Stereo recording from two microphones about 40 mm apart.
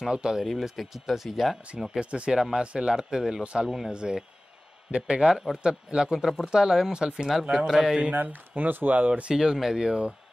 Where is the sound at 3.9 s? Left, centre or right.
Right.